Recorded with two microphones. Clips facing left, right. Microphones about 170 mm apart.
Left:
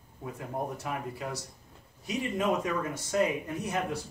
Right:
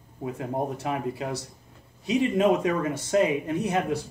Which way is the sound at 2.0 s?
85° right.